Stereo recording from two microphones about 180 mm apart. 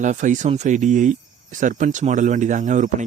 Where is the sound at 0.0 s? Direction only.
45° right (ahead or behind).